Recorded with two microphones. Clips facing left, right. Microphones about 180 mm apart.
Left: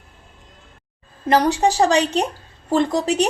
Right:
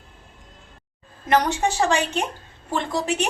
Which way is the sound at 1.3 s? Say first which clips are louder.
Left 4 dB; 35° left (ahead or behind).